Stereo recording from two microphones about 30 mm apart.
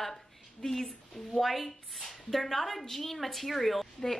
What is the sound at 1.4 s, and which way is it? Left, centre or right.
A woman's voice, centre.